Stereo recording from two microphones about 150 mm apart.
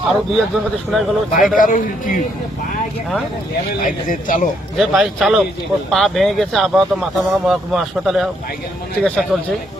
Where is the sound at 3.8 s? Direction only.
60° left (ahead or behind).